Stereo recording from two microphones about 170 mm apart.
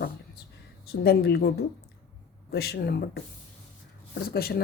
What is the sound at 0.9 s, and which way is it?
A woman's voice, 70° left (ahead or behind).